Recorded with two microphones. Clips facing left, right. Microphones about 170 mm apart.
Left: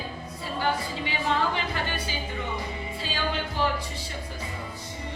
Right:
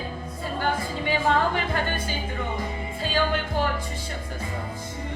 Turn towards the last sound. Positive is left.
turn(degrees=-50)  # may be behind; listen again after turning